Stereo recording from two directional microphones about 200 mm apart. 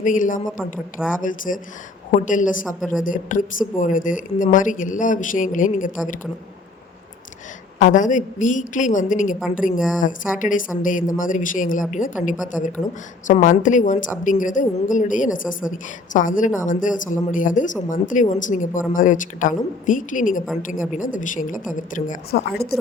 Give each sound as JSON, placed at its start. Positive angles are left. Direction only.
{"t": 0.0, "sound": "speech", "side_deg": 40}
{"t": 0.6, "sound": "speech", "side_deg": -5}
{"t": 1.2, "sound": "speech", "side_deg": 40}
{"t": 7.9, "sound": "speech", "side_deg": 40}